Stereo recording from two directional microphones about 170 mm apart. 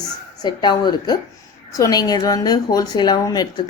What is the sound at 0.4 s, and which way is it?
A woman's voice, 25° left (ahead or behind).